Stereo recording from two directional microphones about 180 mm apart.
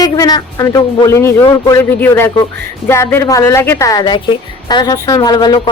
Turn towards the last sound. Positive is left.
turn(degrees=20)  # may be behind; listen again after turning